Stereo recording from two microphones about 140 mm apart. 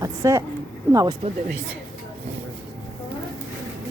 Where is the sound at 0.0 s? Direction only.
20° right (ahead or behind).